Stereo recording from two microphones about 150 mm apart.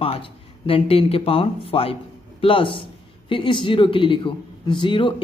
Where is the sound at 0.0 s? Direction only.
40° left (ahead or behind).